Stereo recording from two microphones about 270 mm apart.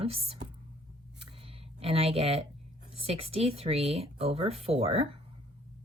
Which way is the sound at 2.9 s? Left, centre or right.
Right.